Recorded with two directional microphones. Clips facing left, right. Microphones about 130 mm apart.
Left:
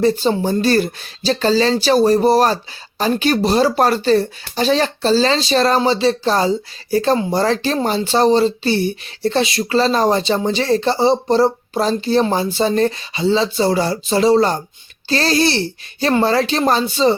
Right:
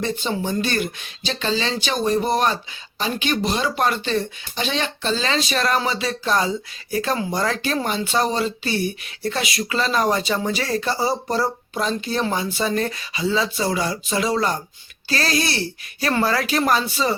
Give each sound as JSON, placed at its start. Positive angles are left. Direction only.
{"t": 0.0, "sound": "speech", "side_deg": 35}